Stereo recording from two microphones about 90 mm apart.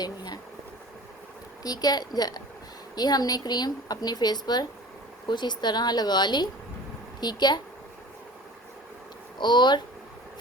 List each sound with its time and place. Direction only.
1.6 s speech: 45° left (ahead or behind)
9.4 s speech: 55° left (ahead or behind)